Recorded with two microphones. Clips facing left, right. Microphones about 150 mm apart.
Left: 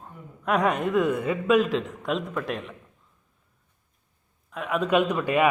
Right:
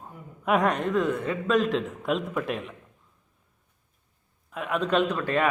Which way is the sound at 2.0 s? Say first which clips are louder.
Right 1 dB; 5° right (ahead or behind).